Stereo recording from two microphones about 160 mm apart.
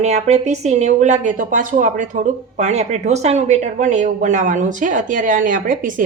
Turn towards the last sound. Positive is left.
turn(degrees=-60)  # may be behind; listen again after turning